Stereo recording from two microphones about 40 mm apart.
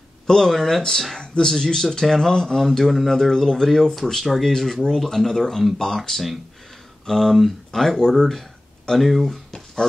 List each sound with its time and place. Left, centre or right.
0.3 s speech: centre
1.2 s speech: left